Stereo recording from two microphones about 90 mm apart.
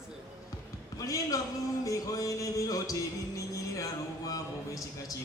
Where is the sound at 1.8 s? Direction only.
40° left (ahead or behind).